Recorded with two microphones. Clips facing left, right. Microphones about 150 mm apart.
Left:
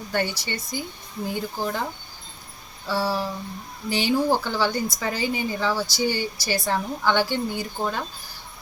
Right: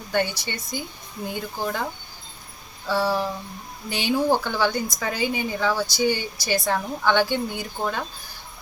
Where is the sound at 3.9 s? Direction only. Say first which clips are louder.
Even; 15° right (ahead or behind).